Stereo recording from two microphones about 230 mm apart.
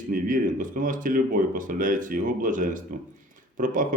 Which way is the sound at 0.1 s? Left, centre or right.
Right.